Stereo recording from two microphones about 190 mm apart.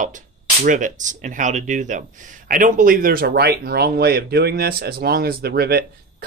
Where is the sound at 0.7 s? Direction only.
40° right (ahead or behind).